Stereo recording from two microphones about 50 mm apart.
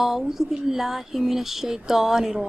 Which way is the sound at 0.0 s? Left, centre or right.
Centre.